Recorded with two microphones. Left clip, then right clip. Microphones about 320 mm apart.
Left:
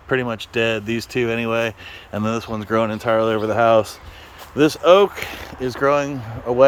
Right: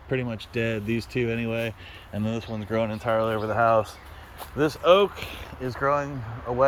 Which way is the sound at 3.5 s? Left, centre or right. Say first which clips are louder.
Left 5 dB; left.